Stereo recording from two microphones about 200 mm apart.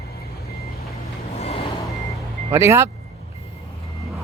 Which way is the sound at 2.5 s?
15° right (ahead or behind).